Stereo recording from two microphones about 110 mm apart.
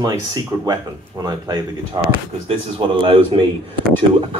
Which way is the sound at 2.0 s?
40° right (ahead or behind).